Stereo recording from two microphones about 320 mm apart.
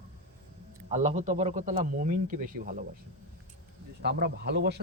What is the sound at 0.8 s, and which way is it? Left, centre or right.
A man's voice, centre.